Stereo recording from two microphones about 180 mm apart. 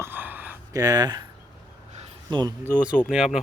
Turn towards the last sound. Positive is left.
turn(degrees=-5)  # may be behind; listen again after turning